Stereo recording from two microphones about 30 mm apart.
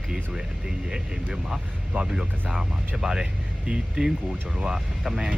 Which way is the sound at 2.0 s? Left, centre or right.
Right.